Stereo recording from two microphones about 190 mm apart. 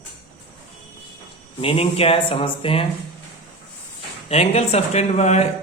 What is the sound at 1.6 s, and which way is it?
Speech, 30° left (ahead or behind).